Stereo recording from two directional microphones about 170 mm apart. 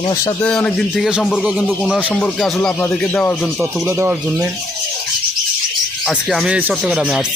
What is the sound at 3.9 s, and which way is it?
Speech, 15° right (ahead or behind).